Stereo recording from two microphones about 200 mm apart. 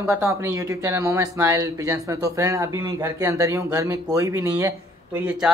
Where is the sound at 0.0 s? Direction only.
15° right (ahead or behind).